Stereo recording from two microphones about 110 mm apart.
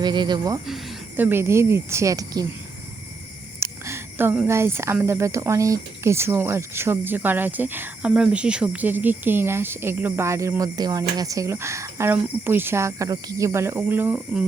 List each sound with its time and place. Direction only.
0.0 s speech: 40° right (ahead or behind)
0.6 s speech: centre (ahead or behind)
1.1 s speech: 20° right (ahead or behind); by 2.5 s 35° right (ahead or behind)
3.6 s a sound: 25° right (ahead or behind)
4.4 s speech: 25° right (ahead or behind)